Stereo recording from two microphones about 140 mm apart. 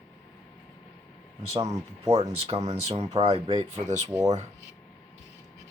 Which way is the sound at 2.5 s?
50° right (ahead or behind).